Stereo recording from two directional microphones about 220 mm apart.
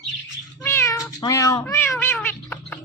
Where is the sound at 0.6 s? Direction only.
10° left (ahead or behind).